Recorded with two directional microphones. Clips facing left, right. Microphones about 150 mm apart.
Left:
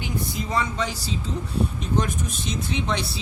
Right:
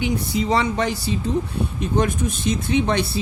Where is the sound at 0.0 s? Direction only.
75° right (ahead or behind).